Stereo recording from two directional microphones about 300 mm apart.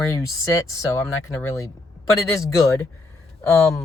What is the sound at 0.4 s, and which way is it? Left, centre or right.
Speech, centre.